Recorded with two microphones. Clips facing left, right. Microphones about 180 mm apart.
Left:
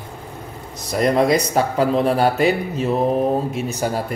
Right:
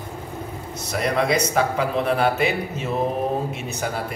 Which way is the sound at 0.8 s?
40° left (ahead or behind).